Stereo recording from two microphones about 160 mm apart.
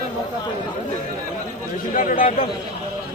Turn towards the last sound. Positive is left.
turn(degrees=55)  # may be behind; listen again after turning